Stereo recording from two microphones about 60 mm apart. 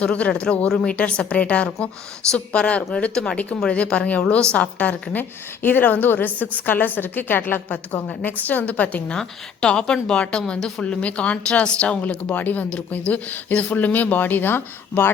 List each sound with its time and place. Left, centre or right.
0.0 s a woman's voice: centre
12.3 s speech: left